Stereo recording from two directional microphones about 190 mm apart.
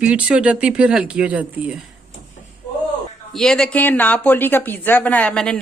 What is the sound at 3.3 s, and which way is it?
Speech, centre (ahead or behind).